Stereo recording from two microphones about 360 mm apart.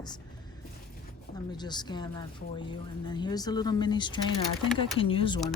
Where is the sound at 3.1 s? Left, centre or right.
Centre.